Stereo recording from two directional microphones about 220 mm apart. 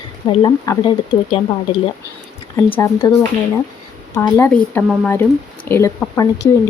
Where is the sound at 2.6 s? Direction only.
10° left (ahead or behind).